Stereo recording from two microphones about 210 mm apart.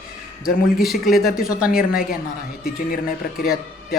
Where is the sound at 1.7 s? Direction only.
45° left (ahead or behind).